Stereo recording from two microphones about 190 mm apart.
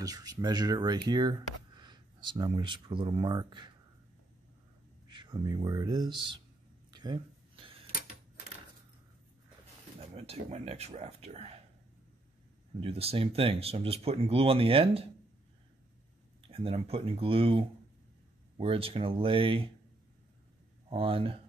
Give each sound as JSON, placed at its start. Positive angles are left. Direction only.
{"t": 0.0, "sound": "speech", "side_deg": -20}
{"t": 5.0, "sound": "speech", "side_deg": -25}
{"t": 6.9, "sound": "a sound", "side_deg": -20}
{"t": 9.9, "sound": "speech", "side_deg": -30}
{"t": 12.8, "sound": "speech", "side_deg": -30}
{"t": 16.4, "sound": "speech", "side_deg": -30}
{"t": 20.9, "sound": "speech", "side_deg": -30}